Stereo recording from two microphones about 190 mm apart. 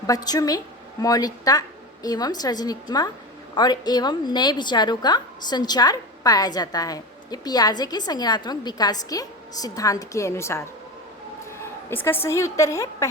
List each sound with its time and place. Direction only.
0.1 s a woman's voice: 20° left (ahead or behind)